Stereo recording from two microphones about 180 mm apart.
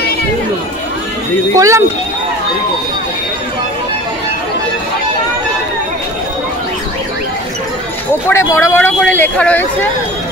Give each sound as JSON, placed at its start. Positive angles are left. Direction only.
{"t": 1.6, "sound": "speech", "side_deg": -15}
{"t": 8.3, "sound": "speech", "side_deg": 15}